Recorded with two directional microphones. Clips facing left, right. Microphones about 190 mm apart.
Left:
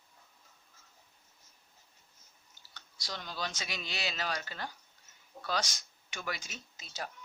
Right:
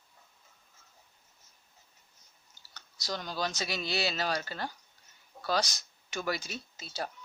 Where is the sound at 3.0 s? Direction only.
40° right (ahead or behind).